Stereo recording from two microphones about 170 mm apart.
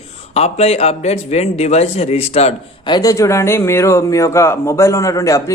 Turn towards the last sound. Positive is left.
turn(degrees=20)  # may be behind; listen again after turning